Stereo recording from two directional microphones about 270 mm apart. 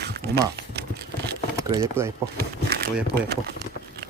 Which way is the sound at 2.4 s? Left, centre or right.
Right.